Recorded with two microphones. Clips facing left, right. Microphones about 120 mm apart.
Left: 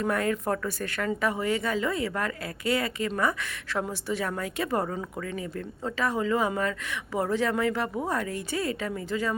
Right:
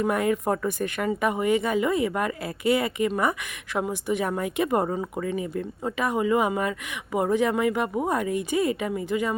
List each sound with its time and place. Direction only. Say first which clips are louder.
0.0 s a woman's voice: right 3 dB; 15° right (ahead or behind)